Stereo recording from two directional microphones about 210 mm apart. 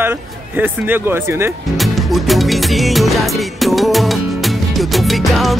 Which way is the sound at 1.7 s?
Centre (ahead or behind).